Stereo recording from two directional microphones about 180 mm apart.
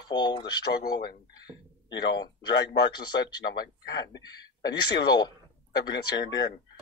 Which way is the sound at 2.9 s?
25° left (ahead or behind).